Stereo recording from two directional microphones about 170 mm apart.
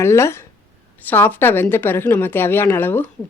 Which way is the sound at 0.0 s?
15° left (ahead or behind).